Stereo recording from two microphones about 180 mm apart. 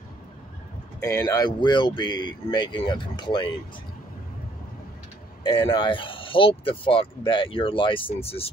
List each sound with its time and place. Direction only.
1.0 s speech: 15° left (ahead or behind)
5.4 s speech: 25° left (ahead or behind)